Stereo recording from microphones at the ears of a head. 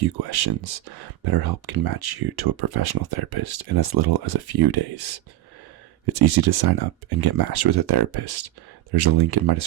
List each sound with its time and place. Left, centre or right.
0.0 s speech: right